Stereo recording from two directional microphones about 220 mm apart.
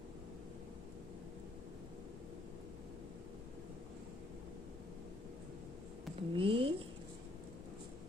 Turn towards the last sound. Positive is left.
turn(degrees=-25)  # may be behind; listen again after turning